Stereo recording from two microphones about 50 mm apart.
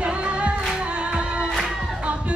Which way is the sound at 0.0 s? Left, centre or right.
Right.